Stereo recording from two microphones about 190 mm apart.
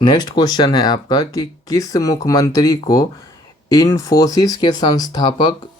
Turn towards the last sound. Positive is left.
turn(degrees=20)  # may be behind; listen again after turning